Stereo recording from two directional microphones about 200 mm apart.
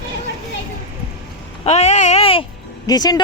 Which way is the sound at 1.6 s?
35° left (ahead or behind).